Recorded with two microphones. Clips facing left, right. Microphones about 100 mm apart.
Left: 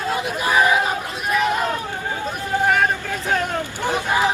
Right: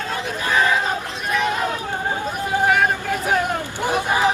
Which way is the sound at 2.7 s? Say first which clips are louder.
Even; 5° right (ahead or behind).